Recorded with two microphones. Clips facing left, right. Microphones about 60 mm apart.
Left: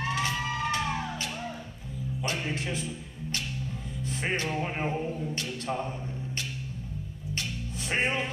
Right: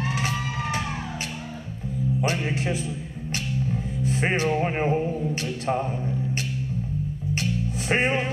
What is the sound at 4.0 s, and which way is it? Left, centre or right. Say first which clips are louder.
Speech: right 6 dB; right.